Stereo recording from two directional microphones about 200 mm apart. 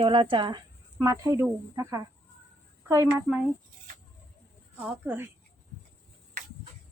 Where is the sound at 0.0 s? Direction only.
25° right (ahead or behind); by 3.4 s 10° right (ahead or behind).